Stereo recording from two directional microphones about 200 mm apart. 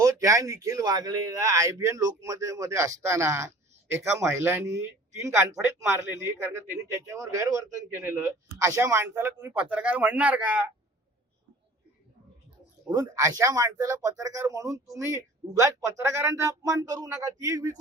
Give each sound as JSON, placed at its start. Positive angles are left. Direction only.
{"t": 0.0, "sound": "speech", "side_deg": -15}
{"t": 12.9, "sound": "speech", "side_deg": -15}